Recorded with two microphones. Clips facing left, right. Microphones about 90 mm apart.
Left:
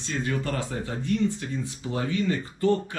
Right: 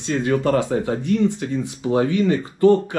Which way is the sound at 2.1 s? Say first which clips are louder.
Right 7 dB; 70° right (ahead or behind).